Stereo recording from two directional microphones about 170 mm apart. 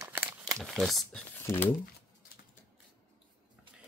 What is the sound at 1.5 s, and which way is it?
Speech, 15° left (ahead or behind).